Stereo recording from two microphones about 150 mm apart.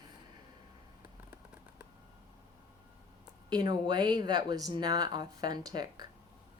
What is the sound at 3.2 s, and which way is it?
A woman's voice, 25° right (ahead or behind).